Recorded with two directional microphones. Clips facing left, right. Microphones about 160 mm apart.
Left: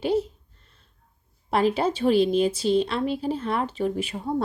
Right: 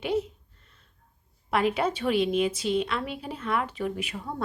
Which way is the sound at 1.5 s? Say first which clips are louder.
Left 3 dB; 30° left (ahead or behind).